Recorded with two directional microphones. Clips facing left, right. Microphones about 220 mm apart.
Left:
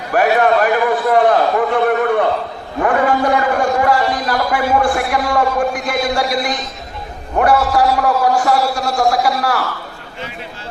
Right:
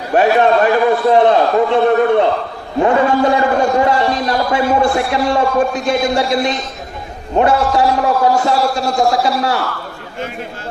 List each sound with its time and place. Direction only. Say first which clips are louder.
0.1 s a man's voice: right 2 dB; 25° right (ahead or behind)